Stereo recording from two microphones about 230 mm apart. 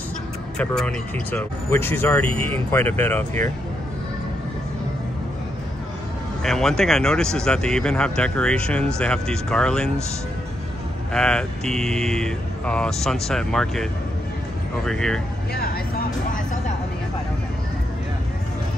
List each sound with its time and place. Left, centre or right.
0.6 s speech: centre
6.4 s speech: centre
11.1 s speech: centre
14.9 s speech: centre
15.5 s speech: left